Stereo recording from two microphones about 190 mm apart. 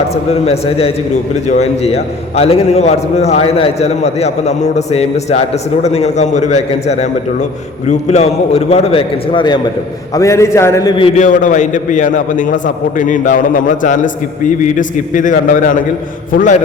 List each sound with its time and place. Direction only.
0.1 s a man's voice: 35° left (ahead or behind)
11.2 s a man's voice: 40° left (ahead or behind)